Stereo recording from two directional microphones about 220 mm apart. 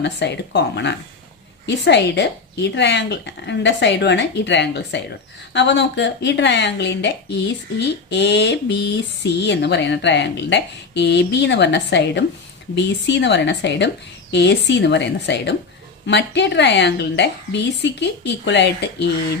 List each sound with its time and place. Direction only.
0.0 s speech: 50° left (ahead or behind)